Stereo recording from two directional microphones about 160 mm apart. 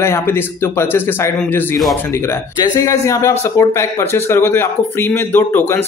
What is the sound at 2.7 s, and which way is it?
A man's voice, 20° left (ahead or behind).